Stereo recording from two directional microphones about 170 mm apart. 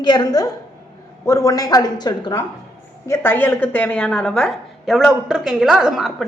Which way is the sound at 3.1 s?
10° left (ahead or behind).